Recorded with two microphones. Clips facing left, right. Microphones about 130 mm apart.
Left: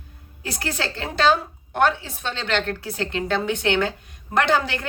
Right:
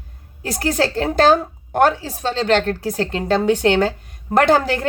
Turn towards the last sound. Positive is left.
turn(degrees=-40)  # may be behind; listen again after turning